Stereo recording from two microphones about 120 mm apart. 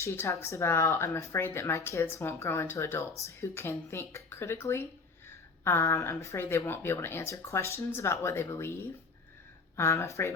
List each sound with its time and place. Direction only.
0.0 s speech: 25° left (ahead or behind)